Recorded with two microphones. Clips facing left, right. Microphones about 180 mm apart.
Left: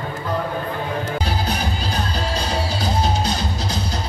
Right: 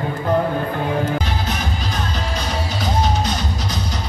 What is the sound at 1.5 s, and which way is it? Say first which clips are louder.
Music: left 1 dB; 35° left (ahead or behind).